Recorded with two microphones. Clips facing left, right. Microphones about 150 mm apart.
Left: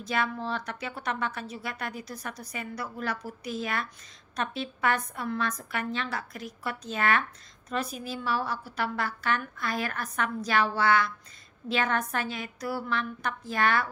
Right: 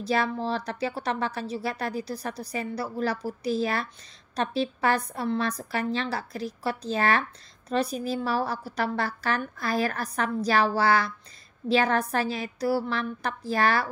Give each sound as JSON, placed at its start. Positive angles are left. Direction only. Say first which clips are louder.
{"t": 0.0, "sound": "a woman's voice", "louder": "right 4 dB", "side_deg": -35}